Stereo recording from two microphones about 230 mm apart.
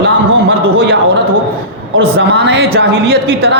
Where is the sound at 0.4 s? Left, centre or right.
Right.